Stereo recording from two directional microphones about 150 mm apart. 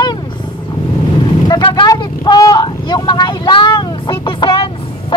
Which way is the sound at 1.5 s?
30° left (ahead or behind).